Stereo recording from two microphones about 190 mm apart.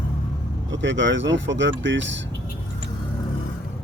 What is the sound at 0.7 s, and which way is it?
Speech, 75° right (ahead or behind).